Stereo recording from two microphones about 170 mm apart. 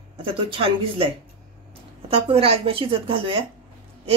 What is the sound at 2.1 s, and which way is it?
Speech, 35° right (ahead or behind).